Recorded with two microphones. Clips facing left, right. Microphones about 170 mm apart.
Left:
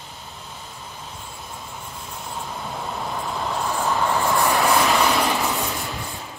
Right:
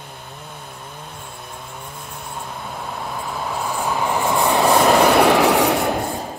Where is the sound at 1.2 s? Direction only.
60° right (ahead or behind).